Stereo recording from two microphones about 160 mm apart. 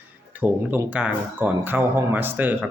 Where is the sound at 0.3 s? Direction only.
10° right (ahead or behind).